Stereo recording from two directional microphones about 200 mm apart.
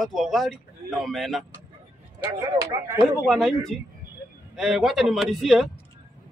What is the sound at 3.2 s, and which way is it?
Speech, centre (ahead or behind).